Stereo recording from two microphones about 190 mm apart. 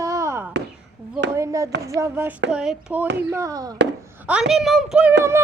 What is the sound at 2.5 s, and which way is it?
Speech, 5° right (ahead or behind).